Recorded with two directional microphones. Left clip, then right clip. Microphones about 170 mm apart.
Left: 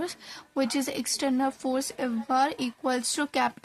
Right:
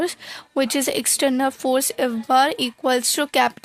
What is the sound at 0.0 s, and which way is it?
Speech, 35° right (ahead or behind).